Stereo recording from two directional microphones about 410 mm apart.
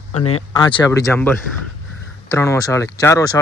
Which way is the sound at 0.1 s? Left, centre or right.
Left.